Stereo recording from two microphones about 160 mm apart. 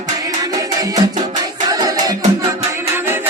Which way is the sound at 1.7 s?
25° right (ahead or behind).